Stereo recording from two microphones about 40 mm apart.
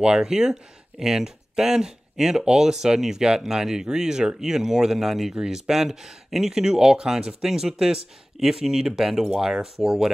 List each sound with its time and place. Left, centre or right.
0.0 s speech: centre